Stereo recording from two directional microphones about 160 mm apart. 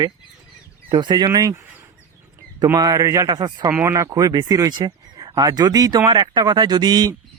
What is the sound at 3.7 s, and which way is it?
Speech, 15° right (ahead or behind).